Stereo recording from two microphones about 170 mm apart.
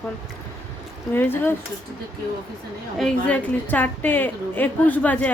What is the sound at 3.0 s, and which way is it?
A woman's voice, 10° left (ahead or behind).